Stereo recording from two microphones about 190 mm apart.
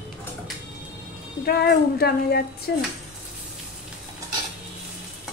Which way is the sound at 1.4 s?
55° left (ahead or behind).